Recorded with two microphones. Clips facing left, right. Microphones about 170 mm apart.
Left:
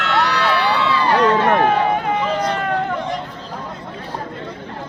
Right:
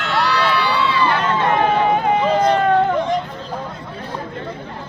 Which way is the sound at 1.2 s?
75° left (ahead or behind).